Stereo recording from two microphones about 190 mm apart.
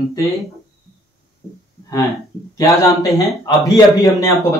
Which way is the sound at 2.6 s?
15° left (ahead or behind).